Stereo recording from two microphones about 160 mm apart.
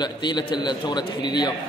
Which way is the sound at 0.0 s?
25° left (ahead or behind).